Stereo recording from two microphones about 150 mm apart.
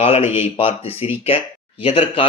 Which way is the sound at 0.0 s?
45° left (ahead or behind).